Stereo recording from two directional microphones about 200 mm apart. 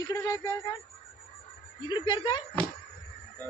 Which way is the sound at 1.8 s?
25° left (ahead or behind).